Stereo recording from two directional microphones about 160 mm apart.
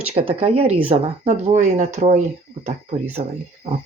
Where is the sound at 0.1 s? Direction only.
40° right (ahead or behind).